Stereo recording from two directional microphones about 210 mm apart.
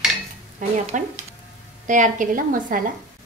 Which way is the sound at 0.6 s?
40° right (ahead or behind).